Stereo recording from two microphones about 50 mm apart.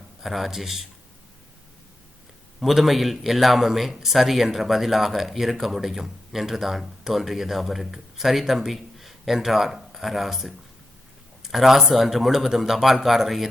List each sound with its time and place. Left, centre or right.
0.2 s a man's voice: centre
2.6 s a man's voice: centre
11.5 s a man's voice: centre